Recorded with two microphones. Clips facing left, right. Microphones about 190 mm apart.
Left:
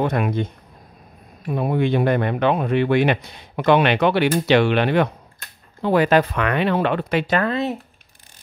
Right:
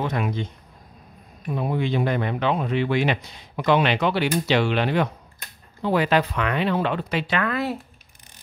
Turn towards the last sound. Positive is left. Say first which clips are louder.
# left 3 dB
turn(degrees=20)  # may be behind; listen again after turning